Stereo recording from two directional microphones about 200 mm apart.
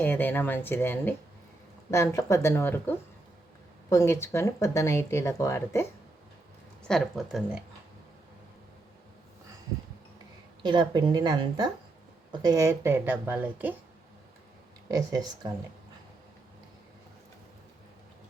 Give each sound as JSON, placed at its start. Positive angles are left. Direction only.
{"t": 0.0, "sound": "speech", "side_deg": 10}
{"t": 6.8, "sound": "speech", "side_deg": 0}
{"t": 10.6, "sound": "a woman's voice", "side_deg": -20}
{"t": 14.8, "sound": "speech", "side_deg": -20}